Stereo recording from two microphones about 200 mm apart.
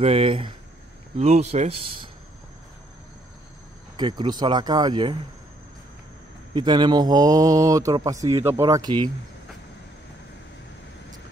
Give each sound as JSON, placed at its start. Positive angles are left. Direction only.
{"t": 0.0, "sound": "speech", "side_deg": -30}
{"t": 3.9, "sound": "speech", "side_deg": -20}
{"t": 6.5, "sound": "speech", "side_deg": -20}